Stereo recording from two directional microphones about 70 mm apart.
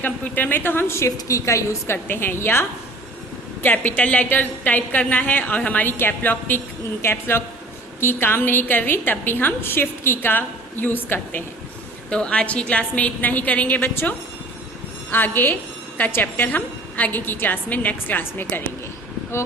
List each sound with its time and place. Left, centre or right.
0.0 s a woman's voice: left
2.0 s a woman's voice: left
3.6 s a woman's voice: left
12.1 s a woman's voice: centre